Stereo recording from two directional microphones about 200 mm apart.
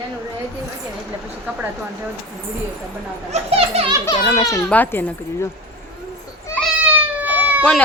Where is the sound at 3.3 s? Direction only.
30° right (ahead or behind).